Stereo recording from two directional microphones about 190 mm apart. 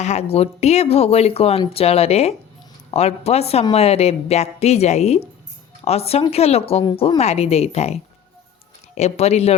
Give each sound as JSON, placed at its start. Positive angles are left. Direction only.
{"t": 0.0, "sound": "a woman's voice", "side_deg": 35}
{"t": 9.0, "sound": "a woman's voice", "side_deg": 35}